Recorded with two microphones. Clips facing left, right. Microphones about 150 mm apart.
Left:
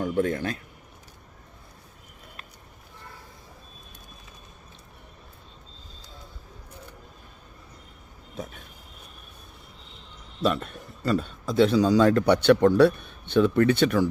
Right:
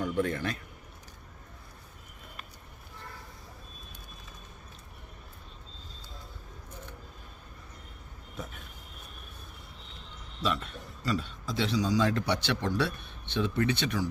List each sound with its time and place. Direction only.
0.0 s a man's voice: 45° left (ahead or behind)
10.4 s a man's voice: 50° left (ahead or behind)